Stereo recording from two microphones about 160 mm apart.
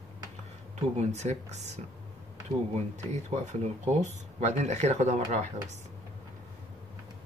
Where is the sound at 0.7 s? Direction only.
45° right (ahead or behind).